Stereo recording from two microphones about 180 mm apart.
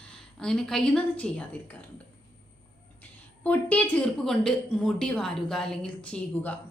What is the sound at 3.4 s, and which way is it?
A woman's voice, 10° left (ahead or behind).